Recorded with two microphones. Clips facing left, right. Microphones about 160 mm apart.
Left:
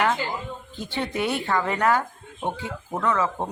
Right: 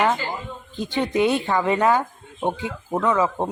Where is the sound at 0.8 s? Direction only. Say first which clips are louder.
Right 7 dB; 15° right (ahead or behind).